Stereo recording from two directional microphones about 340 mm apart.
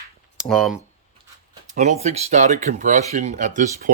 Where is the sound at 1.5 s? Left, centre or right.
Centre.